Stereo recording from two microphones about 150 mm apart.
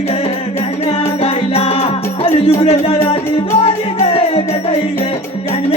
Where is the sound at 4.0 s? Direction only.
40° left (ahead or behind).